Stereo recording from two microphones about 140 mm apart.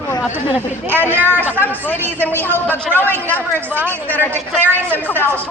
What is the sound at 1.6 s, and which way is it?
Speech, 15° left (ahead or behind).